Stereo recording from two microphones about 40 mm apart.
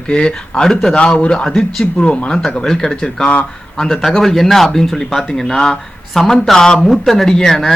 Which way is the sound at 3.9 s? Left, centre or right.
Centre.